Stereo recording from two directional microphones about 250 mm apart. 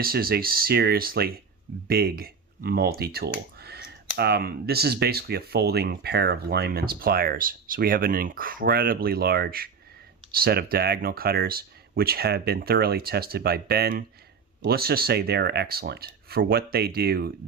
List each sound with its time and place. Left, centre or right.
0.0 s speech: right
3.6 s clicking: right
4.2 s speech: right